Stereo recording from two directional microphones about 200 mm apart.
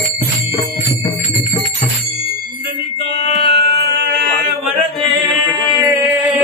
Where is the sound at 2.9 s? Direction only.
60° right (ahead or behind).